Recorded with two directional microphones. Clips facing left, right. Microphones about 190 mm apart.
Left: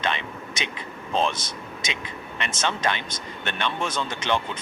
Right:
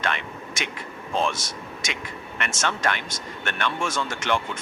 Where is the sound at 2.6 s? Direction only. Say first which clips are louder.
Even; 20° left (ahead or behind).